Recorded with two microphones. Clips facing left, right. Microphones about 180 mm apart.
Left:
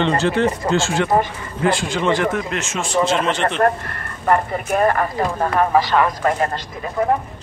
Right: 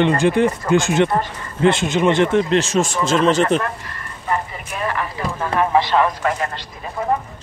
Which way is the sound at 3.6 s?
55° left (ahead or behind).